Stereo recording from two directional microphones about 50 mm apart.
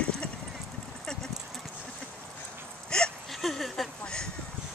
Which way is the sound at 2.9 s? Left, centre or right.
Centre.